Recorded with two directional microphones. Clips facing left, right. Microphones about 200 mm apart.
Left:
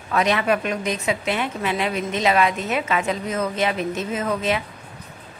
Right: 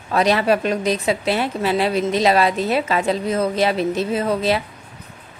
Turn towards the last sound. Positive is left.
turn(degrees=-35)  # may be behind; listen again after turning